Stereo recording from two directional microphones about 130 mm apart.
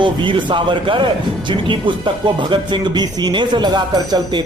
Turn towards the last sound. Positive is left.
turn(degrees=-30)  # may be behind; listen again after turning